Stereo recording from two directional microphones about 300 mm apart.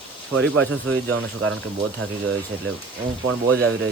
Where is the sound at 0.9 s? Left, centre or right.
Right.